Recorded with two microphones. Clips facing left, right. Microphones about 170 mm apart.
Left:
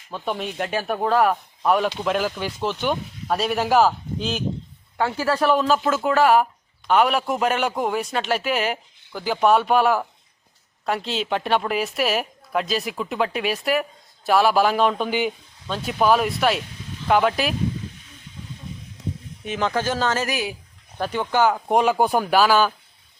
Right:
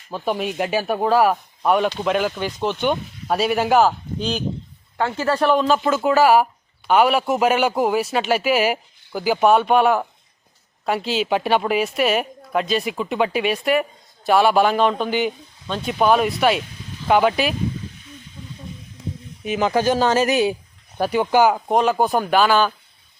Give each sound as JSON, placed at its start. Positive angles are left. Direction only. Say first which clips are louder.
{"t": 0.1, "sound": "speech", "louder": "right 4 dB", "side_deg": -5}
{"t": 19.5, "sound": "speech", "louder": "right 5 dB", "side_deg": -10}
{"t": 21.0, "sound": "speech", "louder": "right 4 dB", "side_deg": -10}
{"t": 21.7, "sound": "speech", "louder": "right 1 dB", "side_deg": 10}